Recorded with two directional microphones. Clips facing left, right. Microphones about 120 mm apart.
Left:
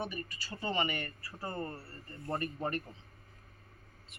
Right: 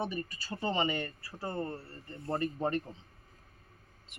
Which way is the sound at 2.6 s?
25° right (ahead or behind).